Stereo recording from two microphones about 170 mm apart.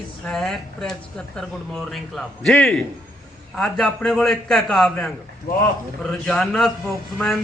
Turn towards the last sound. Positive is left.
turn(degrees=5)  # may be behind; listen again after turning